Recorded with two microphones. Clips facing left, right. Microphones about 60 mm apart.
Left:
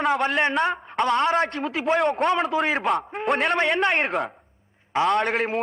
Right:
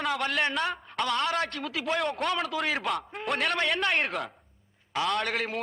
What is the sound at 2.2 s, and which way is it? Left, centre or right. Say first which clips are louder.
A man's voice: left 7 dB; left.